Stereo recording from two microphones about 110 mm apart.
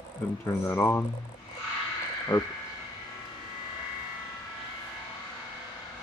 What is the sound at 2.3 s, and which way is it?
Speech, 15° left (ahead or behind).